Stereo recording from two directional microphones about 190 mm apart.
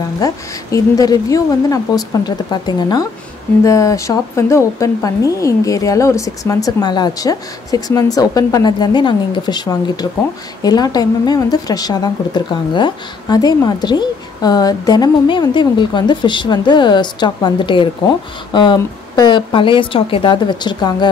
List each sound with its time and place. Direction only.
0.2 s speech: 20° left (ahead or behind)